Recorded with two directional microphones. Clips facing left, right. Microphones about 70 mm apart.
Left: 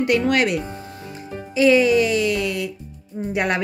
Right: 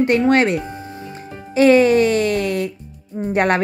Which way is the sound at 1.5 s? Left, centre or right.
Right.